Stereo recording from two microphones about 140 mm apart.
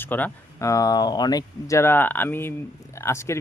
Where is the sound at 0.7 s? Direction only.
25° left (ahead or behind).